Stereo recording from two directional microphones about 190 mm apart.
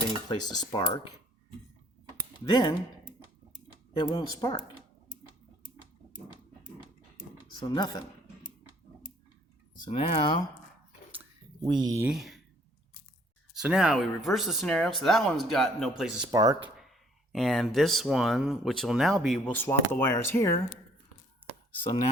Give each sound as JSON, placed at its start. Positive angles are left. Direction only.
{"t": 0.5, "sound": "speech", "side_deg": 20}
{"t": 2.4, "sound": "speech", "side_deg": 20}
{"t": 3.9, "sound": "speech", "side_deg": 20}
{"t": 7.6, "sound": "speech", "side_deg": 25}
{"t": 9.9, "sound": "speech", "side_deg": 25}
{"t": 11.7, "sound": "speech", "side_deg": -20}
{"t": 12.0, "sound": "speech", "side_deg": 0}
{"t": 13.6, "sound": "speech", "side_deg": -5}
{"t": 16.3, "sound": "speech", "side_deg": -20}
{"t": 16.6, "sound": "a sound", "side_deg": 0}
{"t": 17.3, "sound": "speech", "side_deg": 0}
{"t": 19.5, "sound": "speech", "side_deg": 10}